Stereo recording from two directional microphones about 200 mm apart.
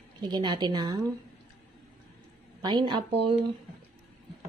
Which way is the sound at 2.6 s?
25° right (ahead or behind).